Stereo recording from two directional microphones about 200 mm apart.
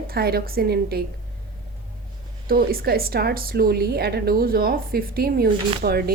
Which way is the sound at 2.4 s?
45° right (ahead or behind).